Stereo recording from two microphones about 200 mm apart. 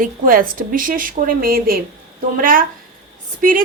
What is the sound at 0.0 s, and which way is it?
A woman's voice, 45° right (ahead or behind).